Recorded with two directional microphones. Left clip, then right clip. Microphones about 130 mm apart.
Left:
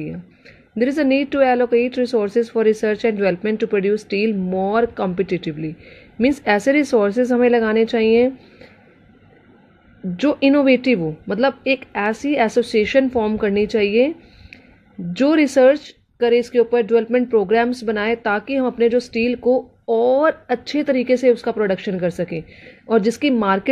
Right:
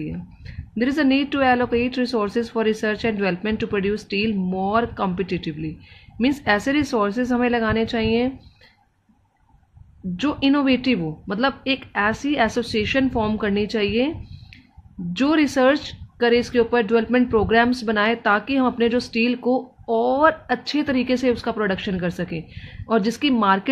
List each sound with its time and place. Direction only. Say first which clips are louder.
0.0 s speech: left 2 dB; 35° left (ahead or behind)
10.1 s speech: left 5 dB; 35° left (ahead or behind)